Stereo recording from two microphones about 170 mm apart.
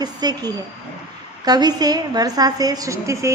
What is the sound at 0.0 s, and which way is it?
A woman's voice, 25° right (ahead or behind).